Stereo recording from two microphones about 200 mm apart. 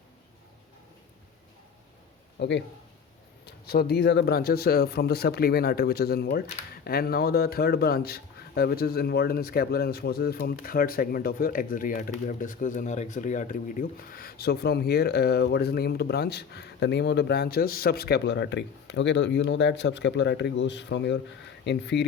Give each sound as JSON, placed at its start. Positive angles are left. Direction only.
{"t": 2.4, "sound": "speech", "side_deg": 60}